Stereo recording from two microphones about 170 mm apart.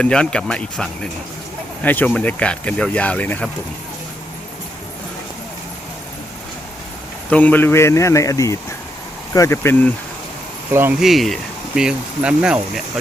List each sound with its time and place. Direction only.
0.0 s speech: 5° left (ahead or behind)
7.3 s speech: 10° left (ahead or behind)
10.7 s speech: 10° right (ahead or behind)
11.0 s speech: centre (ahead or behind)